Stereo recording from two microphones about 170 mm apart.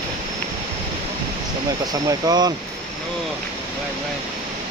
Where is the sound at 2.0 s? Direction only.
20° right (ahead or behind).